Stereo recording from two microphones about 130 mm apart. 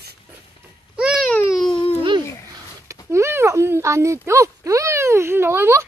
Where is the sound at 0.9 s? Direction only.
5° right (ahead or behind).